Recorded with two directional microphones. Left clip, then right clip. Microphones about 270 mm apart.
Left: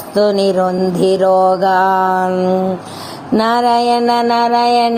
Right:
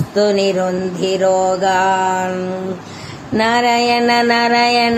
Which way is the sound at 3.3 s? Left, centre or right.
Left.